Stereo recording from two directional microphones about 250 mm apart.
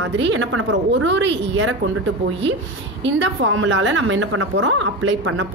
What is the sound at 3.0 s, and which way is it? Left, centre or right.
A woman's voice, right.